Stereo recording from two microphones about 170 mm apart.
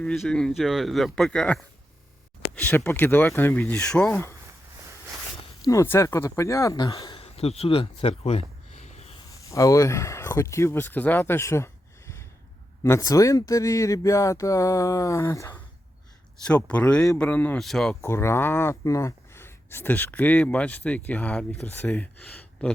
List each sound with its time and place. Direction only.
0.0 s speech: 5° left (ahead or behind)
5.4 s speech: 20° left (ahead or behind); by 9.1 s 40° left (ahead or behind)
9.5 s speech: 20° left (ahead or behind); by 17.9 s centre (ahead or behind)
18.0 s speech: 15° left (ahead or behind)